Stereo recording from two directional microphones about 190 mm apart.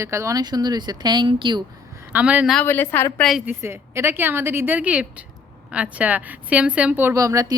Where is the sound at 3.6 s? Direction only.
15° right (ahead or behind).